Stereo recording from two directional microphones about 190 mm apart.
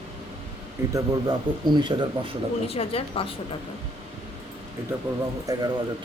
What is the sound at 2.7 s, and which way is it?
Speech, 30° left (ahead or behind).